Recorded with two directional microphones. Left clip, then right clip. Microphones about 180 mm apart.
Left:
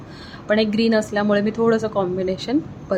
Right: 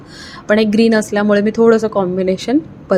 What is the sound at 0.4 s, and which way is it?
A woman's voice, 25° right (ahead or behind).